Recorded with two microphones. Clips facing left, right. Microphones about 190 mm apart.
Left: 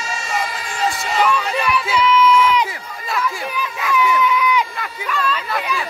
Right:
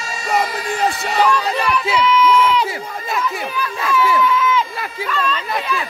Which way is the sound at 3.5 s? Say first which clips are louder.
Right 2 dB; 15° left (ahead or behind).